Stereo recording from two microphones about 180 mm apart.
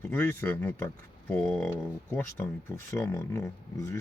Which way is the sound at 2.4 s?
10° left (ahead or behind).